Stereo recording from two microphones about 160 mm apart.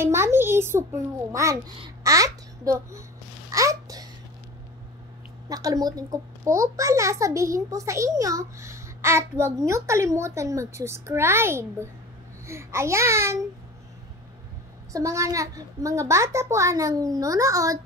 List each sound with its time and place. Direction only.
0.0 s a child's voice: 15° right (ahead or behind)
3.5 s babbling: 20° right (ahead or behind)
5.5 s a child's voice: 20° right (ahead or behind)
14.9 s a child's voice: 20° right (ahead or behind)